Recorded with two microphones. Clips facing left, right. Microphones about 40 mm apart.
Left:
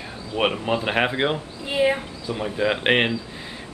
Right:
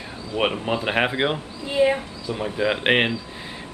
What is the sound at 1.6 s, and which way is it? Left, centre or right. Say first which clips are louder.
Speech: right 1 dB; centre.